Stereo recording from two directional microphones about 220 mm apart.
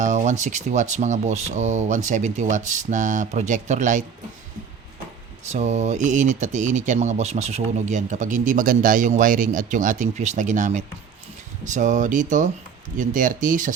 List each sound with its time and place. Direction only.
0.0 s speech: 35° right (ahead or behind)
5.5 s speech: 30° right (ahead or behind)